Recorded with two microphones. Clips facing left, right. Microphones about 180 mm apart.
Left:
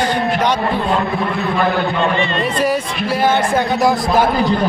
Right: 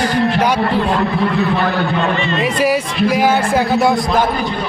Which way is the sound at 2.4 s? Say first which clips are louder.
Right 2 dB; 10° right (ahead or behind).